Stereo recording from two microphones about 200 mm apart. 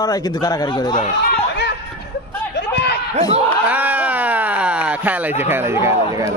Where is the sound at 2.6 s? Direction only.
55° left (ahead or behind).